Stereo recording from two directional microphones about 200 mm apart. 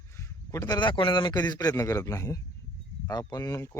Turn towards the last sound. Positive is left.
turn(degrees=15)  # may be behind; listen again after turning